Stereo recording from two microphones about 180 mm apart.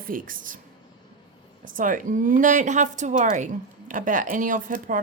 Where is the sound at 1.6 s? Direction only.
50° right (ahead or behind).